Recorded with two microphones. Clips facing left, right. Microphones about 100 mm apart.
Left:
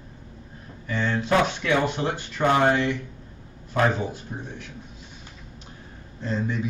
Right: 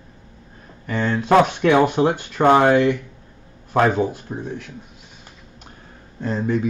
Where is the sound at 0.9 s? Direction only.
50° right (ahead or behind).